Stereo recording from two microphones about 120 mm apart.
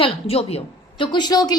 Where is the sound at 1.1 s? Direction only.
35° left (ahead or behind).